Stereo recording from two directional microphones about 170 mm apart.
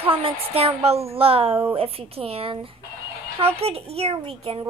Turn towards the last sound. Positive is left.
turn(degrees=-35)  # may be behind; listen again after turning